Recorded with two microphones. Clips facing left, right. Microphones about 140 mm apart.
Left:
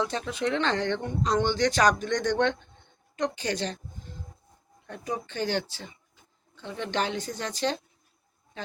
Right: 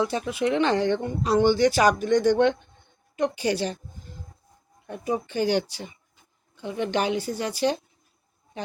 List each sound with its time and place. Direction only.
0.0 s speech: 10° right (ahead or behind)
4.9 s a woman's voice: 10° right (ahead or behind)